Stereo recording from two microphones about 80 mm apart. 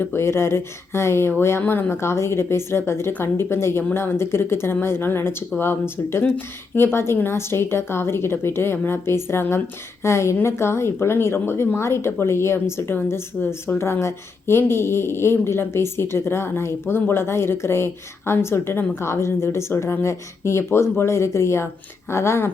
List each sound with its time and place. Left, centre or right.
0.0 s speech: left